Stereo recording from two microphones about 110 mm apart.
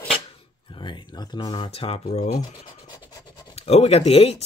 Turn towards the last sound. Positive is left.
turn(degrees=65)  # may be behind; listen again after turning